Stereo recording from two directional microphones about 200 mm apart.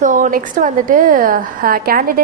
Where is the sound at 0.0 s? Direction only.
40° right (ahead or behind).